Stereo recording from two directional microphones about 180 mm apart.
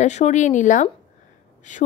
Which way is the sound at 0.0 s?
40° left (ahead or behind).